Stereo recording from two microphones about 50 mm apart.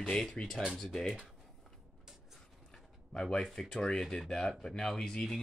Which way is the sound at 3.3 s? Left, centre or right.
Centre.